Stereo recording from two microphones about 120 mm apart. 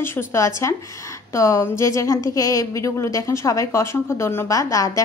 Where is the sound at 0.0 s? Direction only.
20° left (ahead or behind).